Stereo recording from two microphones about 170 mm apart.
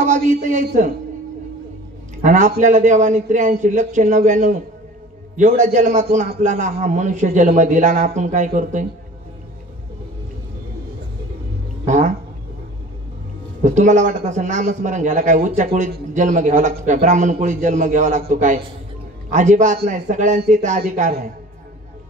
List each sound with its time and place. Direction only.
0.0 s speech: 45° right (ahead or behind)
2.2 s speech: 45° right (ahead or behind)
11.8 s cat: 45° right (ahead or behind)
13.7 s speech: 45° right (ahead or behind)